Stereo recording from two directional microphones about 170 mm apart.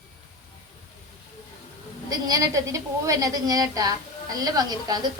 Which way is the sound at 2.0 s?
20° right (ahead or behind).